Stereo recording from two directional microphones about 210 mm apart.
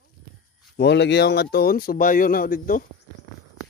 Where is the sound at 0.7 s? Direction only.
55° left (ahead or behind).